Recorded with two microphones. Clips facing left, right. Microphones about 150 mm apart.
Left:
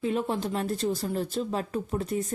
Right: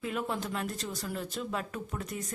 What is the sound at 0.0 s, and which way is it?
Speech, 30° left (ahead or behind).